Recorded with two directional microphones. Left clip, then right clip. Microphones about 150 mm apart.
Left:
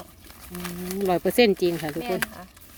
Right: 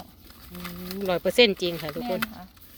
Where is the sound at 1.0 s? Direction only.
45° left (ahead or behind).